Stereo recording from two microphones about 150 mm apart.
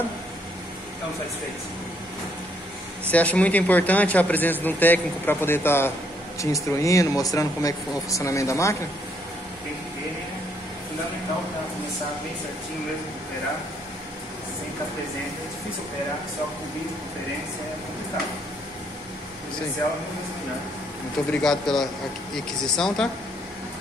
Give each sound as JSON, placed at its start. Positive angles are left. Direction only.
{"t": 3.1, "sound": "speech", "side_deg": 10}
{"t": 21.3, "sound": "speech", "side_deg": 5}